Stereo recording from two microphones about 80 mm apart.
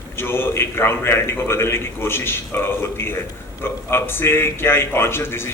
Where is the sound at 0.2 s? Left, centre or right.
Left.